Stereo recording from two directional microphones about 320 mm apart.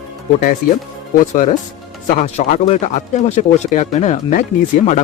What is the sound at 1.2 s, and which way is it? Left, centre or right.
Speech, left.